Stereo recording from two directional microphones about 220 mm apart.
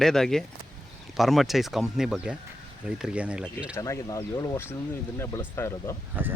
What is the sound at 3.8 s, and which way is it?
Speech, 15° left (ahead or behind).